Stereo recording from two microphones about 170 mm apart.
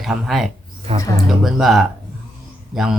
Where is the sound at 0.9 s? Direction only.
35° right (ahead or behind).